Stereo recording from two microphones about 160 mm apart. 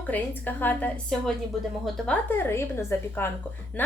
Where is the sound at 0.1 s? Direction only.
10° left (ahead or behind).